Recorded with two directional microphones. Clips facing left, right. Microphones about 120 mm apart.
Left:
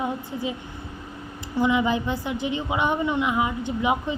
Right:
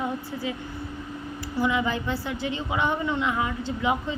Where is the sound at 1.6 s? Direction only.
20° left (ahead or behind).